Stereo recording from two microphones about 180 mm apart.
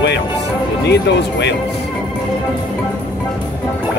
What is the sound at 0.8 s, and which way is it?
Speech, 70° left (ahead or behind).